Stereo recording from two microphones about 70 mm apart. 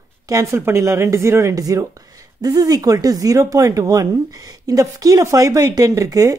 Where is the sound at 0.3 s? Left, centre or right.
Right.